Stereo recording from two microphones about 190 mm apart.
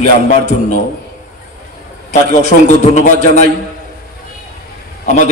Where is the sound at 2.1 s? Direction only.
40° left (ahead or behind).